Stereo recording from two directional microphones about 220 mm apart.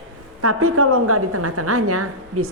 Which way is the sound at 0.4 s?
85° right.